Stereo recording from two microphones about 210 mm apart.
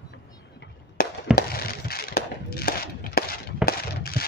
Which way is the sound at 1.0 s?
45° left (ahead or behind).